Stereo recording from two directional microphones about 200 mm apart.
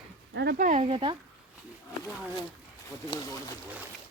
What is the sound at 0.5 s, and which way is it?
Speech, 40° right (ahead or behind).